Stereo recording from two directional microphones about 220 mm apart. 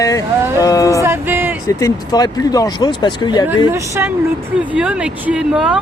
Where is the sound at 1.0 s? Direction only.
10° right (ahead or behind).